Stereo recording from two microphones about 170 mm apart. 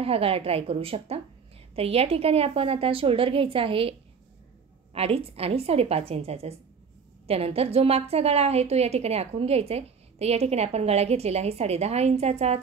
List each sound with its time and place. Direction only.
0.0 s a woman's voice: 35° right (ahead or behind)
4.9 s a woman's voice: 35° right (ahead or behind)